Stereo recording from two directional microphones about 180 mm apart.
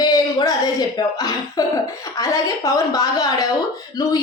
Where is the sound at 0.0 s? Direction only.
20° left (ahead or behind).